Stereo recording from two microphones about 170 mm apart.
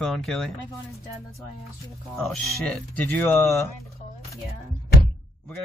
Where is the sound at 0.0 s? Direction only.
Centre (ahead or behind).